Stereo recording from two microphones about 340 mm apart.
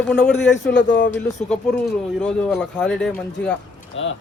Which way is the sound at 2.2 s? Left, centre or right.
Centre.